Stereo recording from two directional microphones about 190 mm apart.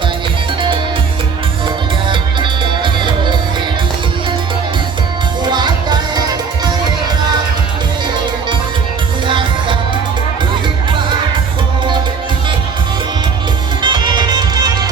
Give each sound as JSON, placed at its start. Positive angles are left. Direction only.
{"t": 2.0, "sound": "music", "side_deg": -25}
{"t": 5.5, "sound": "music", "side_deg": -20}
{"t": 9.2, "sound": "music", "side_deg": -25}
{"t": 13.8, "sound": "music", "side_deg": -25}